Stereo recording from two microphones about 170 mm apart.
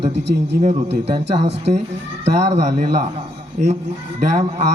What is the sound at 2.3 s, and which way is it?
A man's voice, 40° right (ahead or behind).